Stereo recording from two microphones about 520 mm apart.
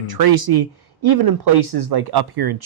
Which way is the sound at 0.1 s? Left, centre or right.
Right.